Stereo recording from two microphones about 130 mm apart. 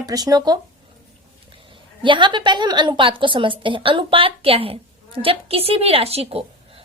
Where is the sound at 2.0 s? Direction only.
40° right (ahead or behind).